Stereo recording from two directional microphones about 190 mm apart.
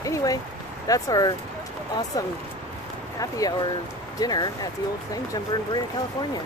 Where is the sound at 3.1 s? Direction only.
20° left (ahead or behind).